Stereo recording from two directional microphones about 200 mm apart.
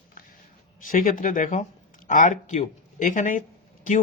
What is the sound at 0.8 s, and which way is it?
Speech, 40° left (ahead or behind).